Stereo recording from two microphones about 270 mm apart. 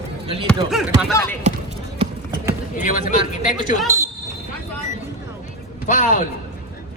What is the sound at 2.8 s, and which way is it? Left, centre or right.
Speech, left.